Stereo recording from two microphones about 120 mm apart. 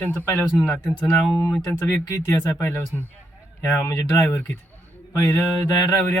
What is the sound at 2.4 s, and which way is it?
Speech, 15° left (ahead or behind).